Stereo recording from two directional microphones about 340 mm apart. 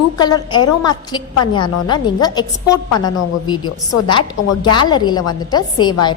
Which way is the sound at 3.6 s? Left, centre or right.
Left.